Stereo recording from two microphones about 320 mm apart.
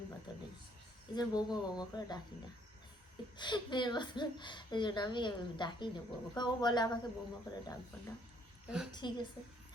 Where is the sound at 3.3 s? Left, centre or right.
Centre.